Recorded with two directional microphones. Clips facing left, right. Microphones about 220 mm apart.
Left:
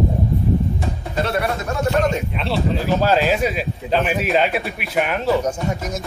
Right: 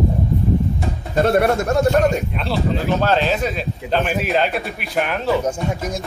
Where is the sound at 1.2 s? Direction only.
50° right (ahead or behind).